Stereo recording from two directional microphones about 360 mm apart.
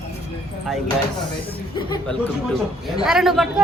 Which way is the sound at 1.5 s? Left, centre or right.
Centre.